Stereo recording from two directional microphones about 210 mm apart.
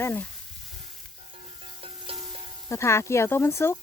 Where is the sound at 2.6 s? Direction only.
15° left (ahead or behind).